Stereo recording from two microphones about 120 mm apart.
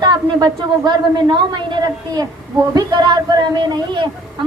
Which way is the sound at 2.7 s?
35° right (ahead or behind).